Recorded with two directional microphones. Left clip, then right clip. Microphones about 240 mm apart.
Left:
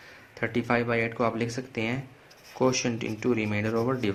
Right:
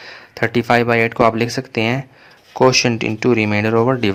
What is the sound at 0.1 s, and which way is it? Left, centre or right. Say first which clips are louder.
Speech: right 12 dB; right.